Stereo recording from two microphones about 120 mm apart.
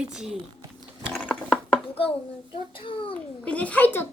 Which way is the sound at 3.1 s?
10° left (ahead or behind).